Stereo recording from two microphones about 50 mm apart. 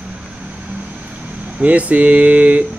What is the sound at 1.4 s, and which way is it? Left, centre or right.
Speech, right.